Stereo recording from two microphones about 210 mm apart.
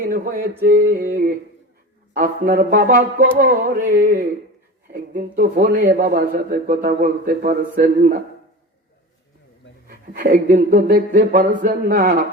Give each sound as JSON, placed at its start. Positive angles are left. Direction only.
{"t": 0.0, "sound": "a sound", "side_deg": -45}
{"t": 0.6, "sound": "speech", "side_deg": -45}
{"t": 9.8, "sound": "speech", "side_deg": -40}